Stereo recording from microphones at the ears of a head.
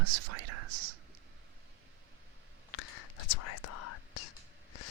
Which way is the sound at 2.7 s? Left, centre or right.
Left.